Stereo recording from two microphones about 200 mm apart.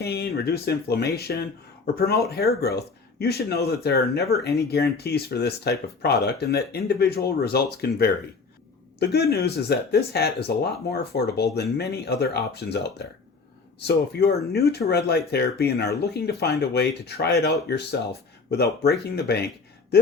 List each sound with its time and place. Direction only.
0.0 s speech: 55° left (ahead or behind)